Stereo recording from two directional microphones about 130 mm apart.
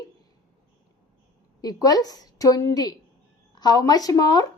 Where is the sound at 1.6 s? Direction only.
30° left (ahead or behind).